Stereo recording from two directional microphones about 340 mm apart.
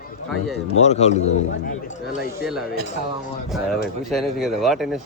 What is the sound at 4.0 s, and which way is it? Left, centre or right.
Speech, centre.